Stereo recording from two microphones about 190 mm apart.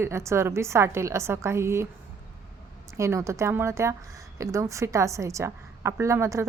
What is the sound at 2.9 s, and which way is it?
A woman's voice, 15° right (ahead or behind).